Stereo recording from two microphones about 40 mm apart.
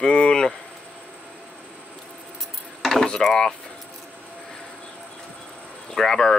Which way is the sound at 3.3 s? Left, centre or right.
Centre.